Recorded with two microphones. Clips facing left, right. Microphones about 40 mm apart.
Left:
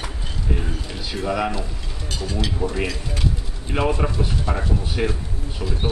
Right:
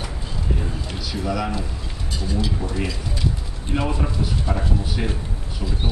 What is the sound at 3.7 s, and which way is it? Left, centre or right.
Speech, left.